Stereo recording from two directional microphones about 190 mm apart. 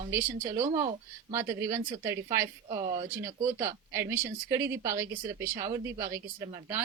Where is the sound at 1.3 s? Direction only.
15° right (ahead or behind).